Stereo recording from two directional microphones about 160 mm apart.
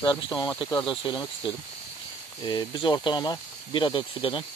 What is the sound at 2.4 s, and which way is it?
Speech, 25° left (ahead or behind).